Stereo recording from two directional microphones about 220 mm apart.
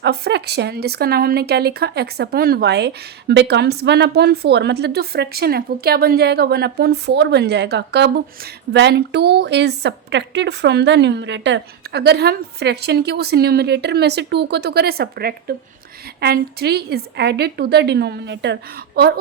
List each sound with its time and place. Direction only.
0.0 s speech: 50° right (ahead or behind)